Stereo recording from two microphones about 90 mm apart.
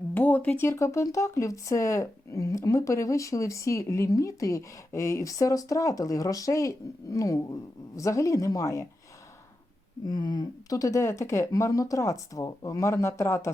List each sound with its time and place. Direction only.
0.1 s a sound: 20° left (ahead or behind)
0.7 s speech: 35° left (ahead or behind)
10.1 s speech: 50° left (ahead or behind); by 13.5 s 30° left (ahead or behind)